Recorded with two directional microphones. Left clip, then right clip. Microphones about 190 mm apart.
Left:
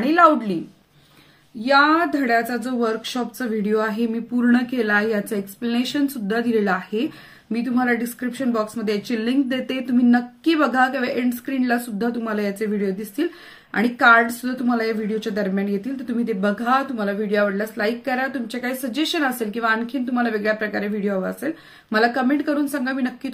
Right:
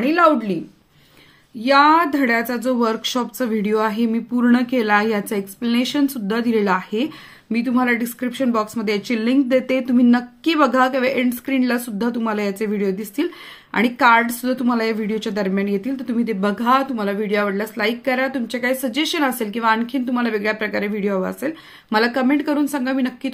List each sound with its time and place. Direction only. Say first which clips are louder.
0.1 s a woman's voice: left 1 dB; 35° right (ahead or behind)
1.6 s a woman's voice: right 3 dB; 35° right (ahead or behind)